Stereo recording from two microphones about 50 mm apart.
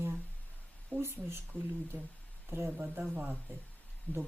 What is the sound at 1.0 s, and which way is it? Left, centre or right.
Speech, right.